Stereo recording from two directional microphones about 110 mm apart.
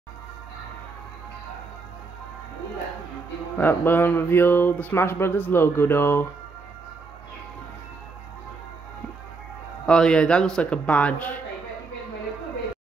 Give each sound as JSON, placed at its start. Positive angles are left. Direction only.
{"t": 3.5, "sound": "speech", "side_deg": 20}
{"t": 9.8, "sound": "a man's voice", "side_deg": 10}